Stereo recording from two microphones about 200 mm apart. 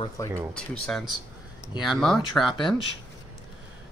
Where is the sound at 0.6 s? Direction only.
Centre (ahead or behind).